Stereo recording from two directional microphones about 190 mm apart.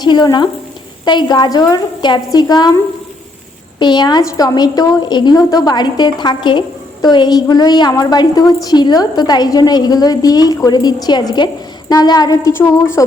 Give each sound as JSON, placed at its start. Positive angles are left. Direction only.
{"t": 0.0, "sound": "a woman's voice", "side_deg": 20}
{"t": 3.8, "sound": "a woman's voice", "side_deg": 25}